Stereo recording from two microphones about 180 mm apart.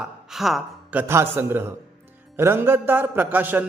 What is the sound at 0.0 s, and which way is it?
A man's voice, centre (ahead or behind).